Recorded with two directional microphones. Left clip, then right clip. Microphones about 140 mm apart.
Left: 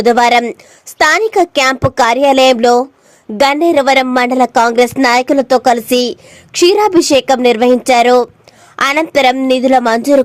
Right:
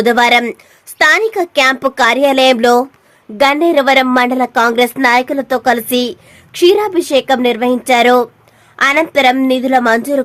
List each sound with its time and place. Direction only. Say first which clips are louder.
0.0 s a woman's voice: left 1 dB; 35° left (ahead or behind)